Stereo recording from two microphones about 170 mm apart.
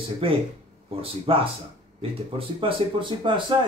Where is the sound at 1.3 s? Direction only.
35° right (ahead or behind).